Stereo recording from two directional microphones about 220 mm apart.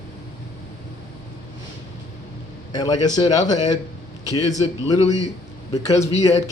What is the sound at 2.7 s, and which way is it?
A man's voice, 20° left (ahead or behind).